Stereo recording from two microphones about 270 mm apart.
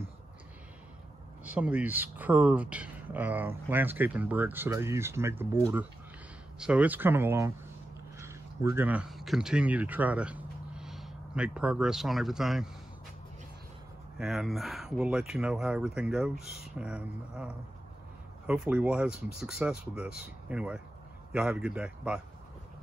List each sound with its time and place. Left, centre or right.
1.4 s speech: centre
6.6 s speech: centre
14.1 s speech: centre